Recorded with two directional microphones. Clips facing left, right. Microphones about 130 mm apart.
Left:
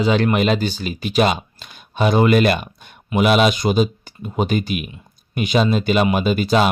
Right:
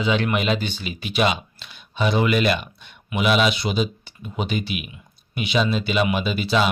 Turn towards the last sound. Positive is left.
turn(degrees=45)  # may be behind; listen again after turning